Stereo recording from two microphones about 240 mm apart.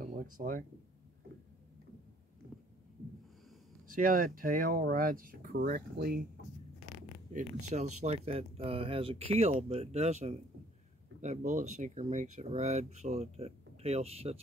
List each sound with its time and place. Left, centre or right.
0.0 s speech: right
3.9 s speech: right
8.0 s speech: right